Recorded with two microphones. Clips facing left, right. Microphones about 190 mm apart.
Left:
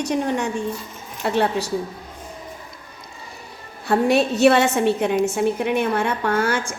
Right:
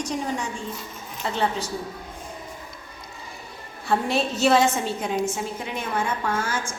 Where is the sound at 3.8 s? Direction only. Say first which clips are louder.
Left 6 dB; 65° left (ahead or behind).